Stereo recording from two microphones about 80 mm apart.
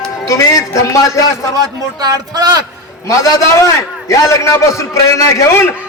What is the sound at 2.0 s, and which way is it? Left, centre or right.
Speech, right.